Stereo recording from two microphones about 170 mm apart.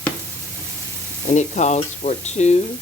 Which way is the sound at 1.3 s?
45° left (ahead or behind).